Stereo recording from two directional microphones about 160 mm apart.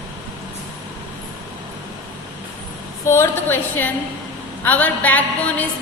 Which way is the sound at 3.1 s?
15° left (ahead or behind).